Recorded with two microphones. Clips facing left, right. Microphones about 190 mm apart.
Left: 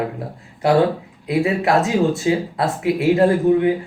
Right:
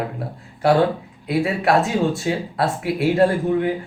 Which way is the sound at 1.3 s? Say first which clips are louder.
Left 1 dB; 20° left (ahead or behind).